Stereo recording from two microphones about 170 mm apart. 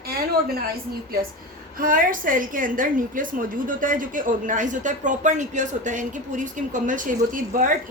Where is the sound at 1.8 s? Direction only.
55° right (ahead or behind).